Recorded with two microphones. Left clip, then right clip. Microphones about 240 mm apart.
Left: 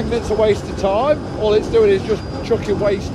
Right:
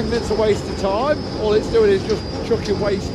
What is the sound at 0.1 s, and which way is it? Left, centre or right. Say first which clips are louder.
Speech: left 3 dB; centre.